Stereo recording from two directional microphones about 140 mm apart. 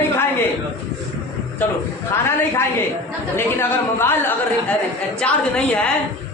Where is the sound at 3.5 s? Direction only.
15° left (ahead or behind).